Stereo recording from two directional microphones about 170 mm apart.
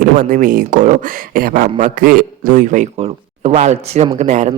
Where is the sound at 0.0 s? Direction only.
55° right (ahead or behind).